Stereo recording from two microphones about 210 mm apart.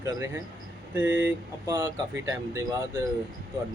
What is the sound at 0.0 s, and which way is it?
Speech, 15° right (ahead or behind).